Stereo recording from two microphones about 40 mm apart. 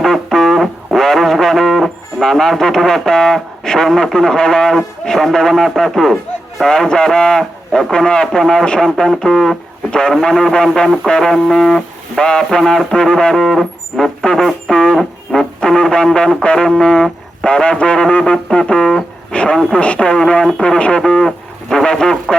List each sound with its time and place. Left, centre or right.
0.0 s a sound: centre
2.2 s a man's voice: centre
11.0 s music: centre
12.2 s a man's voice: centre
14.9 s music: centre
15.6 s a man's voice: centre
17.4 s a man's voice: left
19.3 s radio: left
19.8 s speech: left
21.0 s a sound: centre
21.8 s a man's voice: centre